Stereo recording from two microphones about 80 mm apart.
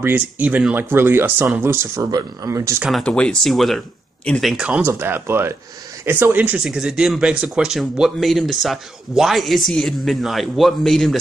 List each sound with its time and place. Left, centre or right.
0.0 s speech: right
2.0 s speech: right
3.0 s speech: centre
3.4 s speech: centre
4.8 s speech: right
6.6 s speech: centre